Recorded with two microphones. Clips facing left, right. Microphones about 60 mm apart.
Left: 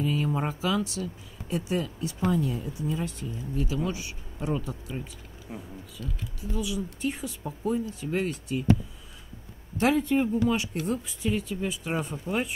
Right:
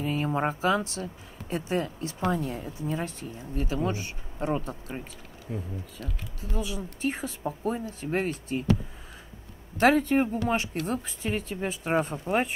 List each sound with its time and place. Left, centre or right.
0.0 s speech: right
5.9 s speech: right
9.8 s speech: right